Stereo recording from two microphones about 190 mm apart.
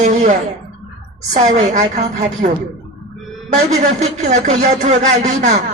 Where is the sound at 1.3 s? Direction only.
40° right (ahead or behind).